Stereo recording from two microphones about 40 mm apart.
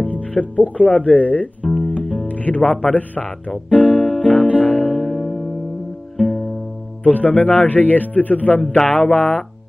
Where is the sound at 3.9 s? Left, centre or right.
Centre.